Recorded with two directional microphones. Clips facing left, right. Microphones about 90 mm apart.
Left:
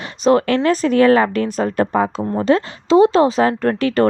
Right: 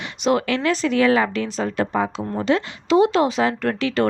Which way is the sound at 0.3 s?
45° left (ahead or behind).